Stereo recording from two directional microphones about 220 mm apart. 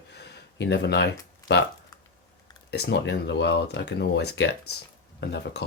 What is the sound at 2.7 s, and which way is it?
Speech, 45° left (ahead or behind).